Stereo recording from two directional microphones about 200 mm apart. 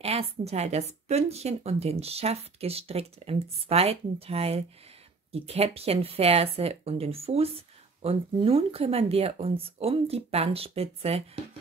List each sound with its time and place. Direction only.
0.0 s a woman's voice: 30° right (ahead or behind)